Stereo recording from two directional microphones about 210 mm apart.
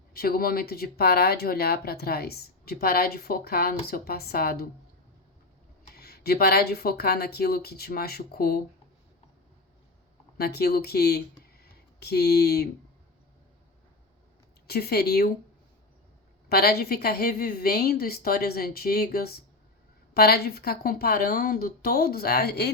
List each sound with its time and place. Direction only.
0.1 s speech: 45° left (ahead or behind)
5.9 s speech: 50° left (ahead or behind)
10.3 s speech: 50° left (ahead or behind)
11.6 s a sound: 50° left (ahead or behind)
14.7 s speech: 50° left (ahead or behind)
16.5 s speech: 45° left (ahead or behind)